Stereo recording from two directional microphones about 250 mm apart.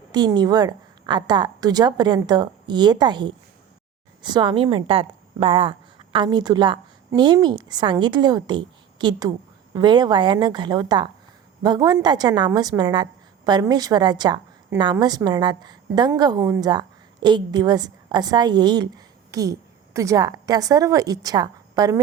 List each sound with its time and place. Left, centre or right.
0.1 s a woman's voice: centre